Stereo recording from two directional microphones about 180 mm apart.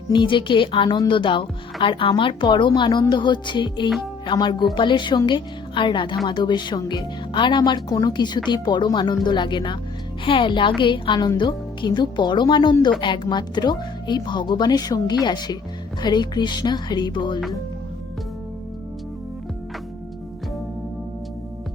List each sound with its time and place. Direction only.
0.1 s speech: 25° left (ahead or behind)